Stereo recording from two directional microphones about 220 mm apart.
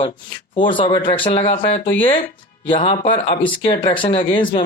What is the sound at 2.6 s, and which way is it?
Speech, 20° left (ahead or behind).